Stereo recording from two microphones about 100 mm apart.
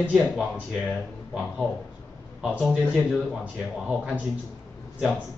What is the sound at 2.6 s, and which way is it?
Speech, centre (ahead or behind).